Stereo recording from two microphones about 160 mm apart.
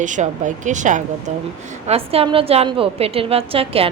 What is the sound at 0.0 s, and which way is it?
Speech, 50° right (ahead or behind).